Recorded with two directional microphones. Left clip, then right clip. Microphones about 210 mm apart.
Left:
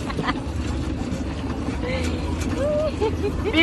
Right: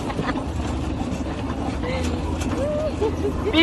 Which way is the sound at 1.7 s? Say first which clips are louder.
Left 1 dB; 15° left (ahead or behind).